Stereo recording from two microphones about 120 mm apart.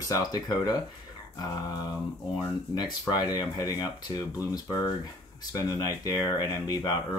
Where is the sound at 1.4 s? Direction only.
30° left (ahead or behind).